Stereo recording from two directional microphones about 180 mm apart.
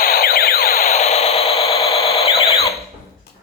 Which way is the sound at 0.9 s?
35° left (ahead or behind).